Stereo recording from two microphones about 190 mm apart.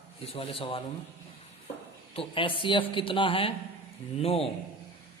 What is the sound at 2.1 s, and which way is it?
A man's voice, 30° left (ahead or behind).